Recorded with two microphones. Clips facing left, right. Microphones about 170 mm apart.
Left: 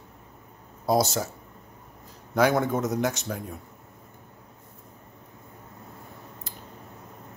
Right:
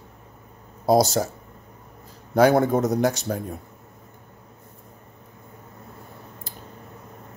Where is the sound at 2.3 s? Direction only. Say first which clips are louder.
Right 5 dB; 35° right (ahead or behind).